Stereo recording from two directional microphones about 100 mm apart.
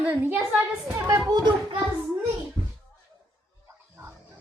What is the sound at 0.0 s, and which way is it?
Speech, 20° right (ahead or behind).